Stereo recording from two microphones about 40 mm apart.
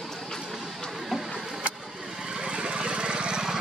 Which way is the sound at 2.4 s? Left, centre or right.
Right.